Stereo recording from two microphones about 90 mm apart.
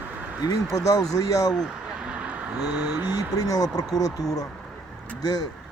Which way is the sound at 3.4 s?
45° left (ahead or behind).